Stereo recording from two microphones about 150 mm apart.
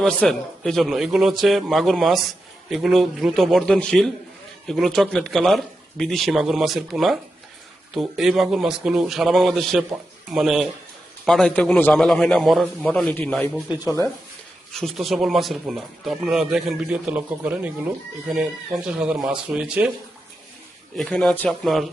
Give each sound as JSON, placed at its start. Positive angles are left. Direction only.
{"t": 0.0, "sound": "speech", "side_deg": 5}
{"t": 13.7, "sound": "speech", "side_deg": 25}
{"t": 14.7, "sound": "speech", "side_deg": 0}
{"t": 18.9, "sound": "speech", "side_deg": -5}
{"t": 20.9, "sound": "speech", "side_deg": 5}